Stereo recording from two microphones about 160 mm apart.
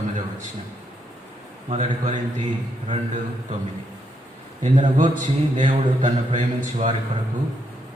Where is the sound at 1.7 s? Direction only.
45° right (ahead or behind).